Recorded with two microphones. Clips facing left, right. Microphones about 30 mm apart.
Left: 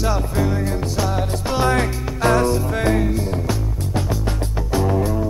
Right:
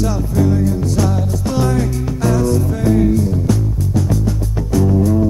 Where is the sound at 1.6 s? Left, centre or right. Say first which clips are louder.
Right 1 dB; left.